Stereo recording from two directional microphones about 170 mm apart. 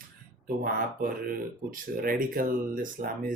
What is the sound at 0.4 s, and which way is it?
Speech, 55° right (ahead or behind).